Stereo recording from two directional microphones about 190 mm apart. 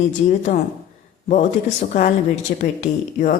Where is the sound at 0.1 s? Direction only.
40° left (ahead or behind).